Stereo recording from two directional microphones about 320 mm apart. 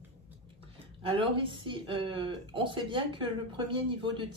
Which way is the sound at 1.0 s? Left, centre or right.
Centre.